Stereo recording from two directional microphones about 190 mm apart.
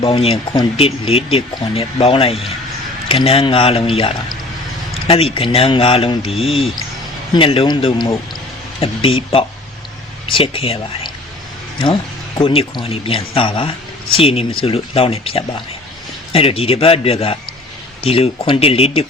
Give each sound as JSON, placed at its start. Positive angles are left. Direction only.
{"t": 0.0, "sound": "speech", "side_deg": 30}
{"t": 12.4, "sound": "a man's voice", "side_deg": 30}